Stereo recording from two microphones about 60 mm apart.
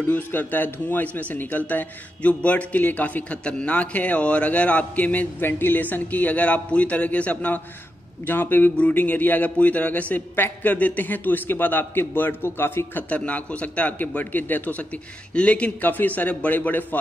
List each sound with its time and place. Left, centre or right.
0.1 s a man's voice: left
13.1 s a man's voice: left